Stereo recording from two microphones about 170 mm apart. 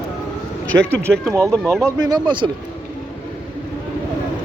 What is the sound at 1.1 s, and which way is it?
Speech, centre (ahead or behind).